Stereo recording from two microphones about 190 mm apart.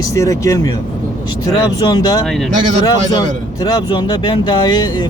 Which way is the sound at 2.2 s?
Centre (ahead or behind).